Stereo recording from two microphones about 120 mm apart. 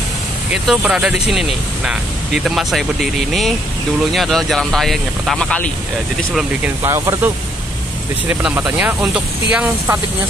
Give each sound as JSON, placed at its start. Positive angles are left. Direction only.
{"t": 0.5, "sound": "speech", "side_deg": -5}
{"t": 6.6, "sound": "speech", "side_deg": -25}
{"t": 8.6, "sound": "speech", "side_deg": -10}